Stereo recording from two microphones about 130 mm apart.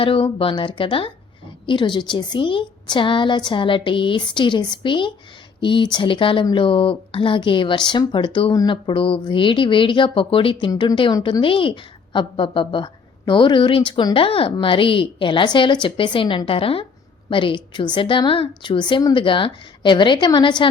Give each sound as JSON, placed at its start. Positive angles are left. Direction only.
{"t": 0.0, "sound": "a woman's voice", "side_deg": 45}